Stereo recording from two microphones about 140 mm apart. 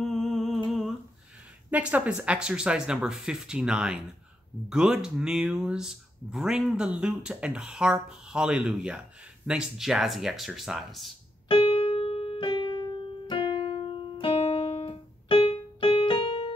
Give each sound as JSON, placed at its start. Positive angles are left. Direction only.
{"t": 0.0, "sound": "humming", "side_deg": 0}
{"t": 1.7, "sound": "speech", "side_deg": -10}
{"t": 11.4, "sound": "piano", "side_deg": 40}